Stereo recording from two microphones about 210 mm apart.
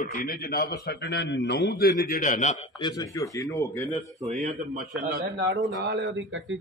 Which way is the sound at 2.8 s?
15° left (ahead or behind).